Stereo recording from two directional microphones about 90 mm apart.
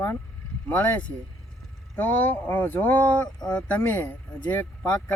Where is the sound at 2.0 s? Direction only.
20° left (ahead or behind).